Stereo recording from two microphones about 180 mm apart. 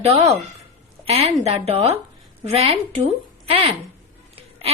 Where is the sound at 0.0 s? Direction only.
35° right (ahead or behind).